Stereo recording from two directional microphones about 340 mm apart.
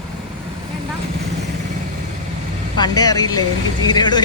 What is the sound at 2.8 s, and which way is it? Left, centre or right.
Speech, centre.